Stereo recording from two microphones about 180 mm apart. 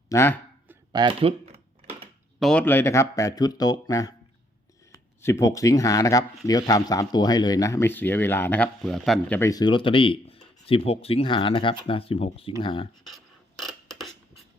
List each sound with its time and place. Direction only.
0.1 s speech: 15° left (ahead or behind)
0.9 s speech: 25° right (ahead or behind)
2.4 s speech: 5° left (ahead or behind)
9.4 s speech: 20° left (ahead or behind)
13.1 s a sound: centre (ahead or behind)